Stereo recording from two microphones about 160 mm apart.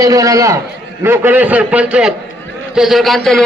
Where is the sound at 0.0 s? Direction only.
20° right (ahead or behind).